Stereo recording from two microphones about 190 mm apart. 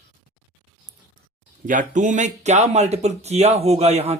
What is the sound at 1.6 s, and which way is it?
Speech, 40° right (ahead or behind).